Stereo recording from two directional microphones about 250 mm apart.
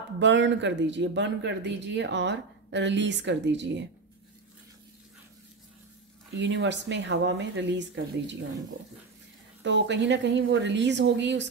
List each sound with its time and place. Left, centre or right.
0.2 s speech: right
6.3 s speech: right
9.6 s speech: right